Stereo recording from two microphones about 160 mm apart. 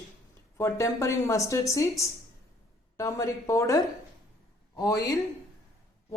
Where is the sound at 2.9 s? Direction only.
20° left (ahead or behind).